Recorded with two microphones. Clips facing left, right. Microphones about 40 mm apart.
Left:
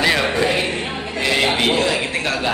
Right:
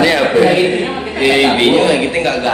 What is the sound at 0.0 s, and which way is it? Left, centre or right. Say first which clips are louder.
A man's voice: right 7 dB; centre.